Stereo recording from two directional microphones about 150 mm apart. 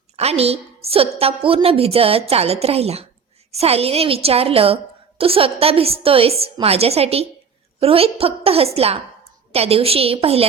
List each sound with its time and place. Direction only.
0.2 s a woman's voice: 45° right (ahead or behind)